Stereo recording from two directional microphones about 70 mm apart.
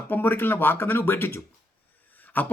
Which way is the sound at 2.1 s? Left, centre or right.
Left.